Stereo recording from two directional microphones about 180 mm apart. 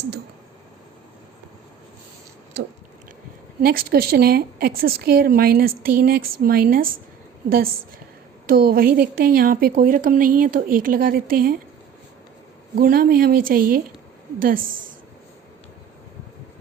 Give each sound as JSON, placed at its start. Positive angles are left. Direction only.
{"t": 3.6, "sound": "a woman's voice", "side_deg": -55}
{"t": 8.4, "sound": "a woman's voice", "side_deg": -55}
{"t": 12.7, "sound": "a woman's voice", "side_deg": -55}